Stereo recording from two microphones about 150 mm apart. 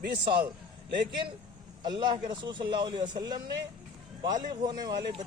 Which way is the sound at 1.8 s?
30° right (ahead or behind).